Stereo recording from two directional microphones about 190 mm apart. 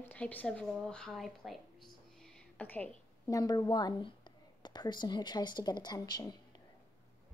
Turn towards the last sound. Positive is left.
turn(degrees=20)  # may be behind; listen again after turning